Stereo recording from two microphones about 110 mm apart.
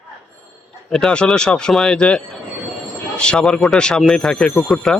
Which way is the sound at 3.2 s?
5° left (ahead or behind).